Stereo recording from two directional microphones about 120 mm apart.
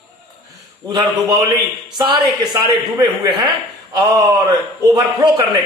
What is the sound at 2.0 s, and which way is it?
A man's voice, 40° right (ahead or behind).